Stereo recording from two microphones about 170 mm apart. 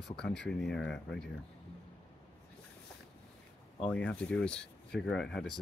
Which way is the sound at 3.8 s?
5° left (ahead or behind).